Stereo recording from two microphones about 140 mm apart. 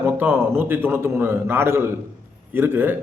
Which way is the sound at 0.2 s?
15° right (ahead or behind).